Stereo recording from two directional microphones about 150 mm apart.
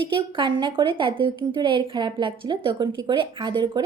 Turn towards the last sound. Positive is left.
turn(degrees=-25)  # may be behind; listen again after turning